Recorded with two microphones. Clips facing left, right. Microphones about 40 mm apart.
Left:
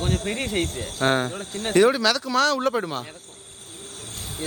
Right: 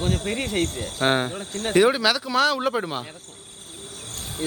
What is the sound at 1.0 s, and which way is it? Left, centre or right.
A man's voice, centre.